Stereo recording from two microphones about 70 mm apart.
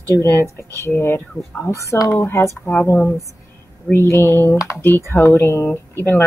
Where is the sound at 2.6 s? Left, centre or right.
Left.